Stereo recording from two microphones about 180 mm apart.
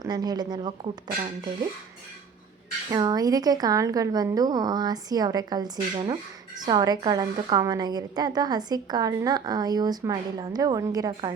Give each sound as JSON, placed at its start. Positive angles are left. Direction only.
{"t": 0.0, "sound": "a woman's voice", "side_deg": -20}
{"t": 2.9, "sound": "a woman's voice", "side_deg": -20}